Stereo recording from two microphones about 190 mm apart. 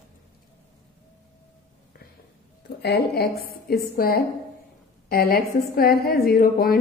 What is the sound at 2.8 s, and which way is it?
A woman's voice, 55° left (ahead or behind).